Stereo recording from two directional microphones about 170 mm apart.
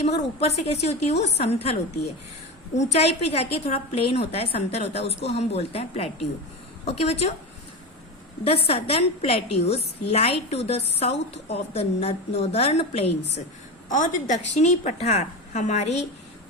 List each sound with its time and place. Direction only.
0.0 s a woman's voice: 40° left (ahead or behind)
8.6 s a woman's voice: 35° left (ahead or behind)